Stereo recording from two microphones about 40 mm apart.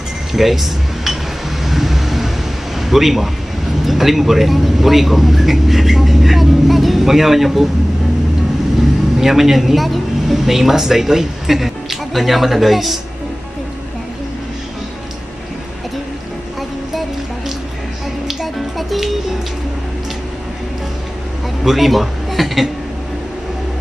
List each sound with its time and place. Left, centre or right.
0.3 s speech: centre
1.6 s vehicle: centre
2.8 s a man's voice: centre
9.2 s speech: centre
18.2 s music: centre
21.6 s speech: centre